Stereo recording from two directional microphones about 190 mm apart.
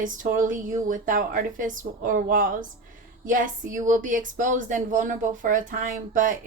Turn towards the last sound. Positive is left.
turn(degrees=-45)  # may be behind; listen again after turning